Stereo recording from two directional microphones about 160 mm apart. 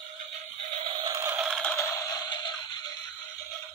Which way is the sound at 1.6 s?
15° left (ahead or behind).